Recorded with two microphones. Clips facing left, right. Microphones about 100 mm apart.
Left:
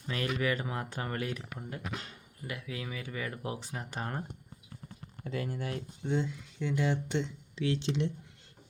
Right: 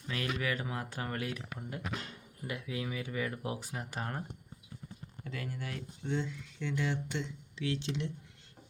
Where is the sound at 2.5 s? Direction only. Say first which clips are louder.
Right 2 dB; 15° right (ahead or behind); by 4.2 s centre (ahead or behind).